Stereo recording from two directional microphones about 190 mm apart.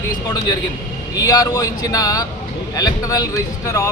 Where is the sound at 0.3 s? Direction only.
20° left (ahead or behind).